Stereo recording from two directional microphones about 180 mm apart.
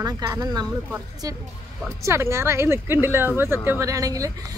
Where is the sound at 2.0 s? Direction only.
15° right (ahead or behind).